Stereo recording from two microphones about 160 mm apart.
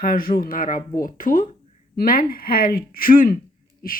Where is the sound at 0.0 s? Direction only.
60° left (ahead or behind).